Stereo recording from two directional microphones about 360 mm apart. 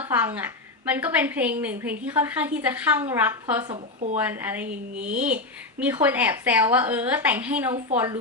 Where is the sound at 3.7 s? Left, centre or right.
Centre.